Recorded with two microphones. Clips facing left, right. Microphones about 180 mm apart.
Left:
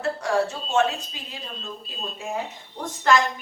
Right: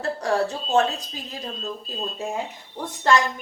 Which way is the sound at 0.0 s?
35° right (ahead or behind).